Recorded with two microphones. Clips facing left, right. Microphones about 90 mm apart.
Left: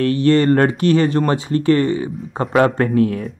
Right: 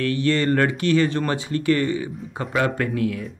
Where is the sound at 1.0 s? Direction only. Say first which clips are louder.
Left 6 dB; 45° left (ahead or behind).